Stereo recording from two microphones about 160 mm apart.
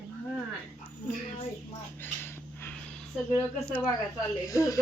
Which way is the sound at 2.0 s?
15° left (ahead or behind).